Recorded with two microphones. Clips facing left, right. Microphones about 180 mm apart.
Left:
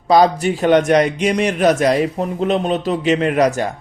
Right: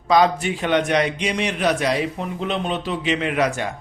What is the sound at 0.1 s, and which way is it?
A man's voice, 40° left (ahead or behind).